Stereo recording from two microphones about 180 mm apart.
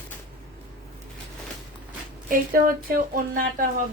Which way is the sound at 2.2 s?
50° right (ahead or behind).